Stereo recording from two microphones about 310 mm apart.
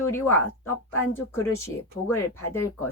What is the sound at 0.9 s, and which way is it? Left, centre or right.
Speech, left.